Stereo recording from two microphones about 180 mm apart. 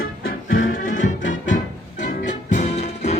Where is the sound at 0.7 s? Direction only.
45° left (ahead or behind).